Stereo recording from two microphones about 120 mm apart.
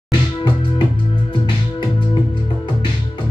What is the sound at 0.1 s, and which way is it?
Music, 45° left (ahead or behind).